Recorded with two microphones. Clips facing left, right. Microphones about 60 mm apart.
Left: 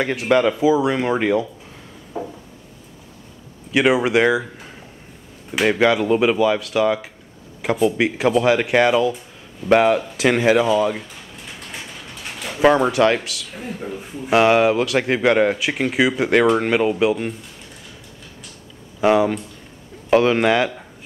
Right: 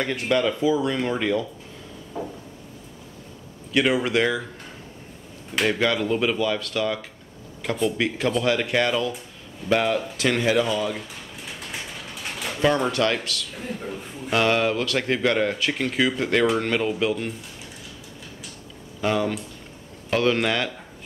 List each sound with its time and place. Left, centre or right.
0.0 s speech: centre
1.1 s speech: left
2.1 s a sound: centre
3.8 s speech: centre
5.5 s speech: centre
10.2 s speech: left
10.6 s speech: centre
11.4 s pigeon: centre
12.7 s speech: centre
18.9 s speech: centre